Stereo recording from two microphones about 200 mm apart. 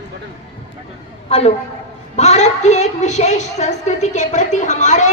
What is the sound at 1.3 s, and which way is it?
A woman's voice, 30° left (ahead or behind).